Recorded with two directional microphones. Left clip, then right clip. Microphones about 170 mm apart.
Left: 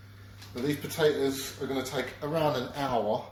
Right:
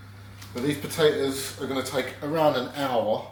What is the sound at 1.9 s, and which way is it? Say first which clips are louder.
Speech: right 4 dB; 30° left (ahead or behind).